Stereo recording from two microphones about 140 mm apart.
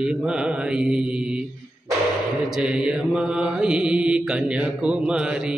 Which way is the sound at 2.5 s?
5° right (ahead or behind).